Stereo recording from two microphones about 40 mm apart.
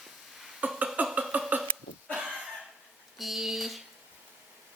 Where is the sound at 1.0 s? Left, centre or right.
Right.